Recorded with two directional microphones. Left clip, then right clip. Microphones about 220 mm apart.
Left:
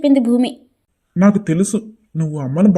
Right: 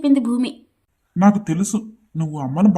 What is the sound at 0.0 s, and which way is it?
A woman's voice, 10° left (ahead or behind).